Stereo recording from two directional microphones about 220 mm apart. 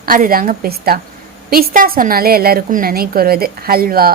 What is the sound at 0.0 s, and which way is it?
A woman's voice, 40° right (ahead or behind).